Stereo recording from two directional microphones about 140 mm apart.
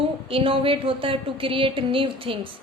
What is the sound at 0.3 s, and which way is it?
A woman's voice, 40° right (ahead or behind).